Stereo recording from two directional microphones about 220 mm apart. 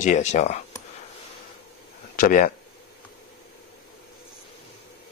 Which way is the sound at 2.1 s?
40° left (ahead or behind).